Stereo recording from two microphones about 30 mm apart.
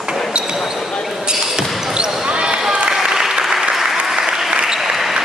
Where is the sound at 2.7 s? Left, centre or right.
Right.